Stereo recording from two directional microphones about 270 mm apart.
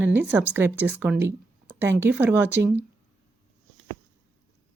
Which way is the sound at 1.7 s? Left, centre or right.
Centre.